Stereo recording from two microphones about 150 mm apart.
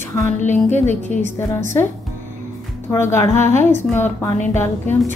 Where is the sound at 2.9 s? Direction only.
15° left (ahead or behind).